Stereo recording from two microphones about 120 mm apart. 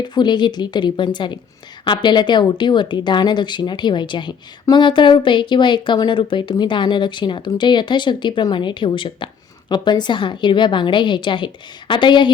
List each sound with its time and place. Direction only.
0.0 s speech: 40° left (ahead or behind)